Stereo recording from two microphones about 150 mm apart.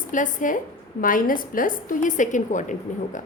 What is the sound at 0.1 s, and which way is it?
A woman's voice, 60° left (ahead or behind).